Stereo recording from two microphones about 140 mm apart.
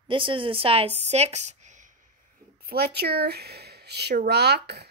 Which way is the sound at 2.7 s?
90° right.